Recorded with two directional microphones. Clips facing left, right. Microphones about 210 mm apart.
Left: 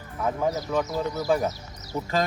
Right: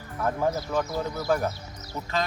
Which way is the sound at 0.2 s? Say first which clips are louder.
Even; 5° left (ahead or behind).